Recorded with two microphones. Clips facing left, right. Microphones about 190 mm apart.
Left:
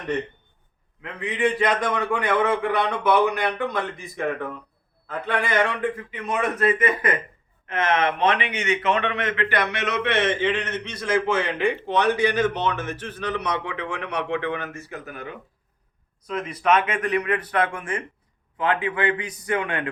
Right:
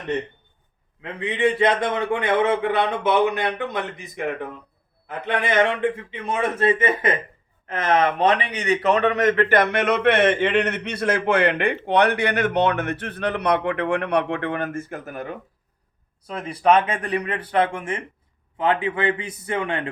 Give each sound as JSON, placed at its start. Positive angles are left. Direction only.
{"t": 1.0, "sound": "a man's voice", "side_deg": -25}
{"t": 16.2, "sound": "a man's voice", "side_deg": -30}